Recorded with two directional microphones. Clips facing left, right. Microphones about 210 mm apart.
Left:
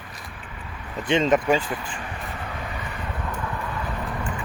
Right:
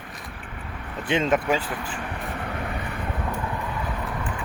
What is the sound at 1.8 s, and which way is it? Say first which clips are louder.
Vehicle: right 2 dB; 60° right (ahead or behind).